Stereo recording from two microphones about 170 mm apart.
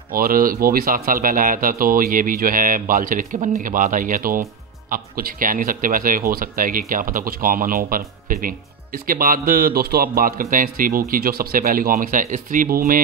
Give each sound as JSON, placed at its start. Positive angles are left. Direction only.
{"t": 0.1, "sound": "speech", "side_deg": -60}